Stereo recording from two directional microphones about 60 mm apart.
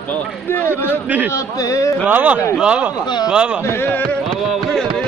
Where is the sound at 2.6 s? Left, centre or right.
Centre.